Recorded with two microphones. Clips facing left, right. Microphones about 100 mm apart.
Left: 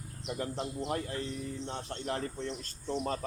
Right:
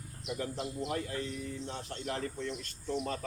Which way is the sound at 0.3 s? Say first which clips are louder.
Left 1 dB; 35° left (ahead or behind).